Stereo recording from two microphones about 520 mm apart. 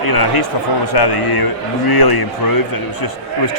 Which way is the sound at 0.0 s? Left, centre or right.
Left.